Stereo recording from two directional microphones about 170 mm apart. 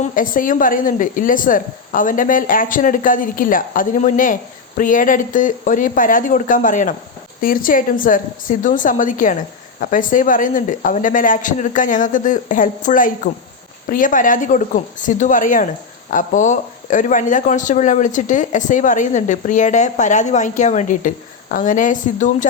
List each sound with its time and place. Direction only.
0.0 s speech: 55° left (ahead or behind)